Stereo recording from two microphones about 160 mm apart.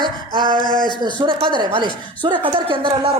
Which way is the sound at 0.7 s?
25° left (ahead or behind).